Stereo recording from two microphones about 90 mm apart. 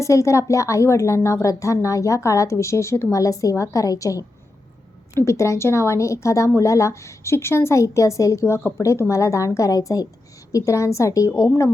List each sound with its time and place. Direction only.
0.0 s a woman's voice: 35° left (ahead or behind)